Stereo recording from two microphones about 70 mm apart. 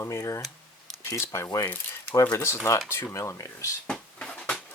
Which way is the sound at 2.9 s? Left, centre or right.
Left.